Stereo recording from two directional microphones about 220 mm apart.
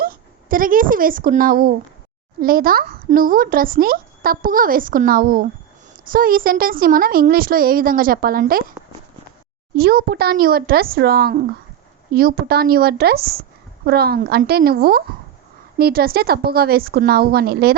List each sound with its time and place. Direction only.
0.0 s speech: 40° right (ahead or behind)
9.7 s a woman's voice: 40° right (ahead or behind)